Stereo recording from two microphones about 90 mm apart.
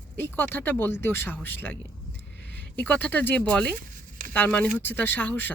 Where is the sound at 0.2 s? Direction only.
20° left (ahead or behind).